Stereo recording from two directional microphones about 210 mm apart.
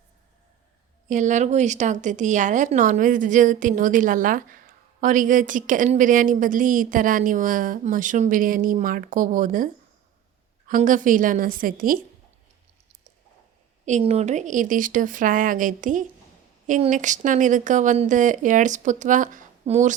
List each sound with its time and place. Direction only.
1.1 s a woman's voice: 35° right (ahead or behind)
10.7 s a woman's voice: 40° right (ahead or behind)
13.8 s a woman's voice: 35° right (ahead or behind)